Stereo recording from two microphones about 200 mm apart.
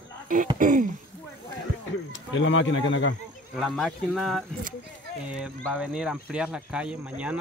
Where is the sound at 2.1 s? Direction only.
70° left (ahead or behind).